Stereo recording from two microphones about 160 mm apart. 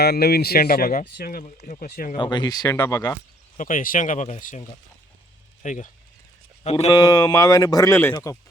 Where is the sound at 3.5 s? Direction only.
55° left (ahead or behind).